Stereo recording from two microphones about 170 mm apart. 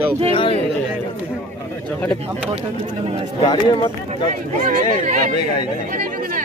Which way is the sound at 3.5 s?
25° left (ahead or behind).